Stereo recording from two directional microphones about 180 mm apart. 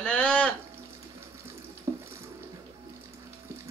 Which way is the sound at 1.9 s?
15° right (ahead or behind).